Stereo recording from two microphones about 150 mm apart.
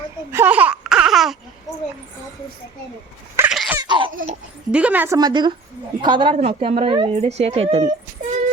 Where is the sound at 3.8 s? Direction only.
30° right (ahead or behind).